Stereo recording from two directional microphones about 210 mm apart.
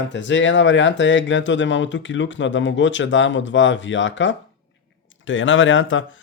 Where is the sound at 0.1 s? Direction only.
60° left (ahead or behind).